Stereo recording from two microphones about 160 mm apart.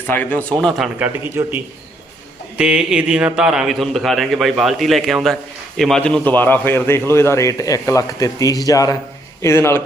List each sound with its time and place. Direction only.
0.1 s a man's voice: 10° left (ahead or behind)
0.9 s a man's voice: 10° right (ahead or behind); by 9.8 s 15° left (ahead or behind)